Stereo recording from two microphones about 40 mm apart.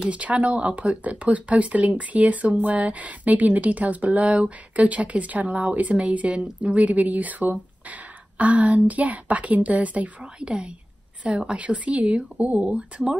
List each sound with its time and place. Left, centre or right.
0.1 s a woman's voice: right
10.2 s speech: right